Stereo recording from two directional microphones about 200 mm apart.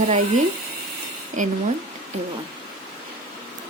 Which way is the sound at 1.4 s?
40° right (ahead or behind).